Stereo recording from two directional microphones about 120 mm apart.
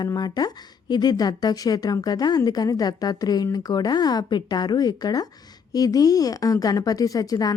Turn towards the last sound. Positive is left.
turn(degrees=30)  # may be behind; listen again after turning